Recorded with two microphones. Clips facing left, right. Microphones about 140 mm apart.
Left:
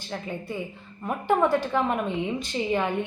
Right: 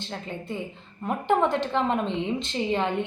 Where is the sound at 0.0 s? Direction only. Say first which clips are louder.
Left 1 dB; 20° right (ahead or behind).